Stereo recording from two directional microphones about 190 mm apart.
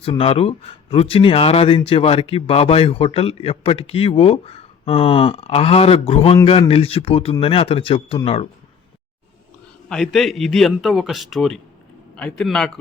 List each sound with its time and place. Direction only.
0.0 s a man's voice: 30° left (ahead or behind)
9.9 s a man's voice: centre (ahead or behind)